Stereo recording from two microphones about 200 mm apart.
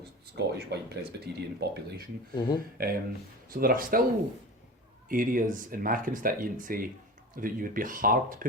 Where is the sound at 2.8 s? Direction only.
45° right (ahead or behind).